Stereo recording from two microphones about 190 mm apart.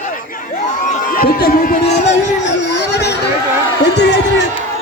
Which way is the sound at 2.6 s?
60° left (ahead or behind).